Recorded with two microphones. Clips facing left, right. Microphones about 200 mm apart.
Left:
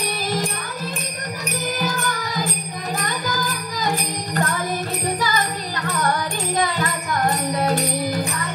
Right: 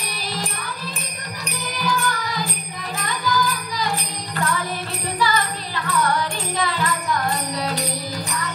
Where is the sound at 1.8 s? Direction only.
45° left (ahead or behind).